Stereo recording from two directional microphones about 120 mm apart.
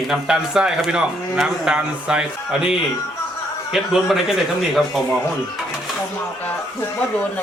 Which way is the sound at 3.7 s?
Centre (ahead or behind).